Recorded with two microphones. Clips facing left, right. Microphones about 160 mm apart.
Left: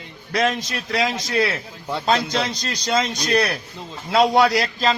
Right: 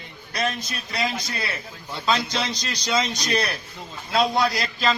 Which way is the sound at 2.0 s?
50° left (ahead or behind).